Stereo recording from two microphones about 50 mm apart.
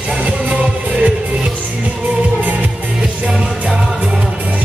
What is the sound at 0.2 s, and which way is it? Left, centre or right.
Music, right.